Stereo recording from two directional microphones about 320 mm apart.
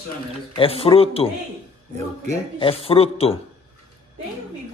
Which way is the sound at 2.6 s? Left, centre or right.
Centre.